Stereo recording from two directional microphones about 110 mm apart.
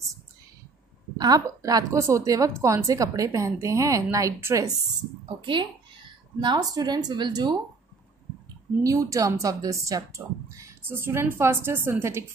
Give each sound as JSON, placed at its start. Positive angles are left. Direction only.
{"t": 1.1, "sound": "a woman's voice", "side_deg": -35}
{"t": 5.4, "sound": "speech", "side_deg": -45}
{"t": 8.8, "sound": "a woman's voice", "side_deg": -30}